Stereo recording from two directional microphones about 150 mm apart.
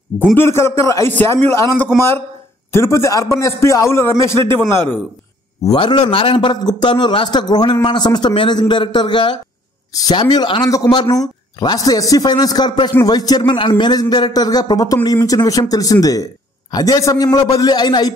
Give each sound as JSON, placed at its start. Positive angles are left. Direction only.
{"t": 0.2, "sound": "a man's voice", "side_deg": 15}
{"t": 5.6, "sound": "a man's voice", "side_deg": 30}